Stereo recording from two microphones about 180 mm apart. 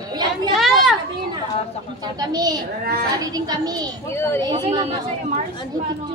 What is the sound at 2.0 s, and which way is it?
A child's voice, 20° right (ahead or behind).